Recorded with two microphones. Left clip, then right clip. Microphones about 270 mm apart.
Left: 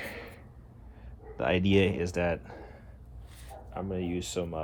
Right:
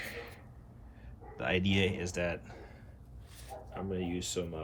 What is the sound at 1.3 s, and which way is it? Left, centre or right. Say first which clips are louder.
A man's voice: left 6 dB; centre.